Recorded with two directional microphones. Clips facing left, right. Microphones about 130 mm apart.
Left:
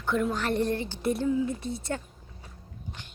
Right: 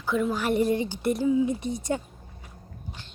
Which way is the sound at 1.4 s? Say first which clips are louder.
Right 4 dB; 15° right (ahead or behind).